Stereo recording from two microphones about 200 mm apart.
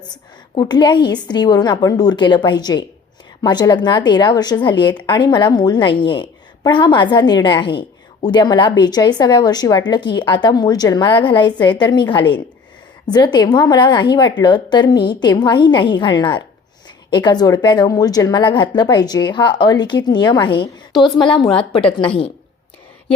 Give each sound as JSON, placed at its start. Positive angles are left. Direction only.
{"t": 0.5, "sound": "a woman's voice", "side_deg": 20}